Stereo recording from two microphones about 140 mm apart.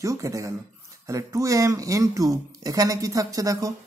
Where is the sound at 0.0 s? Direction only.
25° right (ahead or behind).